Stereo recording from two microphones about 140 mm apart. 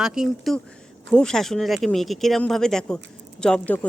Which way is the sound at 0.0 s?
5° right (ahead or behind).